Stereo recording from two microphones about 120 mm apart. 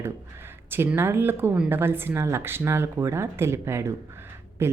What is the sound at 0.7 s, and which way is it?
A woman's voice, 20° right (ahead or behind).